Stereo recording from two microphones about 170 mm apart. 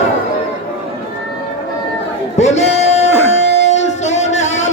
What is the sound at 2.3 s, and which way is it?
Speech, 40° left (ahead or behind).